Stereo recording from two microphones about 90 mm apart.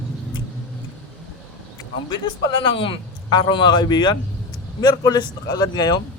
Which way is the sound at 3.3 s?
60° left (ahead or behind).